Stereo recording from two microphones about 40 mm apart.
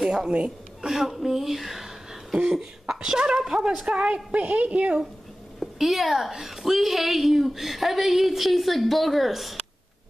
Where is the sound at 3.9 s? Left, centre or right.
Right.